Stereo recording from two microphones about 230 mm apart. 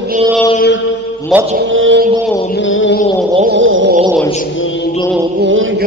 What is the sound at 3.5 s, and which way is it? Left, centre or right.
Mantra, right.